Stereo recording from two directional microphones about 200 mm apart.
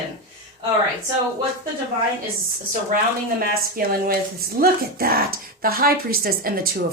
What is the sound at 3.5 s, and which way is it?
Speech, 50° right (ahead or behind).